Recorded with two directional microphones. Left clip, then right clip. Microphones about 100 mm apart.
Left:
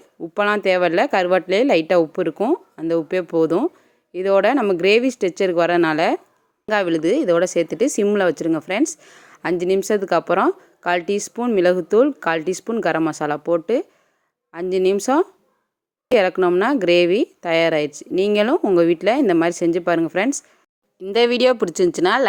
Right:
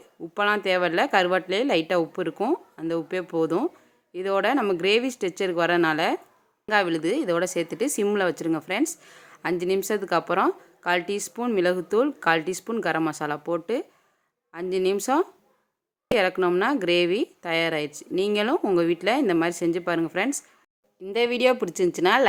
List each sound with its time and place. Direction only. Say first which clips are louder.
0.3 s a woman's voice: left 5 dB; 55° left (ahead or behind)
21.0 s speech: left 6 dB; 90° left; by 22.3 s 60° left (ahead or behind)